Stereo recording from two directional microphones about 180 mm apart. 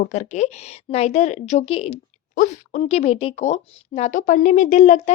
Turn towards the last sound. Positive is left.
turn(degrees=40)  # may be behind; listen again after turning